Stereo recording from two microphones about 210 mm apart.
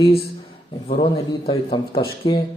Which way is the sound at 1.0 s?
25° left (ahead or behind).